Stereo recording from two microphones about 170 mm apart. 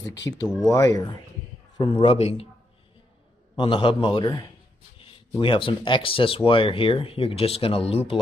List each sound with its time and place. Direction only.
0.3 s a man's voice: 15° left (ahead or behind)
1.8 s speech: 30° left (ahead or behind)
3.5 s a man's voice: 30° left (ahead or behind)